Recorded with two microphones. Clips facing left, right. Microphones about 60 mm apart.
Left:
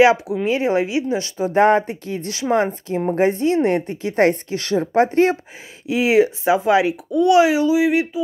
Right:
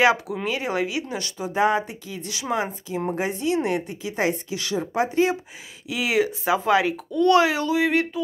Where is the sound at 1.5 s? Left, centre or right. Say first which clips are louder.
Left 6 dB; left.